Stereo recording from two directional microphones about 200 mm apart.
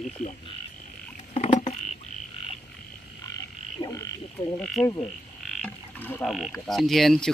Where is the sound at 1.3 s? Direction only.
35° left (ahead or behind).